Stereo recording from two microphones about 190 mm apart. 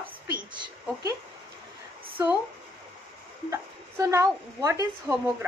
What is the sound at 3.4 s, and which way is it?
Speech, 15° right (ahead or behind).